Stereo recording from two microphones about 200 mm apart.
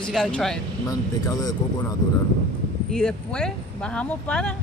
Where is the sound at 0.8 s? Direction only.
20° left (ahead or behind).